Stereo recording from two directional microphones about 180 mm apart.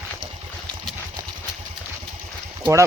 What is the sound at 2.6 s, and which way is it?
Speech, 15° right (ahead or behind).